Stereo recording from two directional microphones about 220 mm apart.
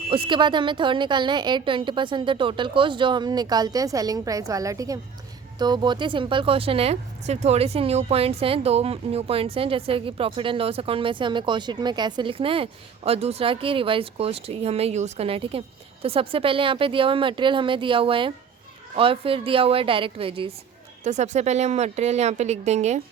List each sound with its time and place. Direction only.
0.1 s a woman's voice: 25° right (ahead or behind)